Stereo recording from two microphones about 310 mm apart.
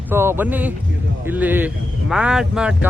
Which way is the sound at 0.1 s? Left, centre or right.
Centre.